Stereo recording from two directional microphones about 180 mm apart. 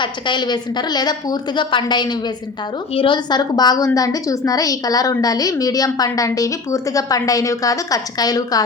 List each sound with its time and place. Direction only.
0.0 s a woman's voice: 25° left (ahead or behind)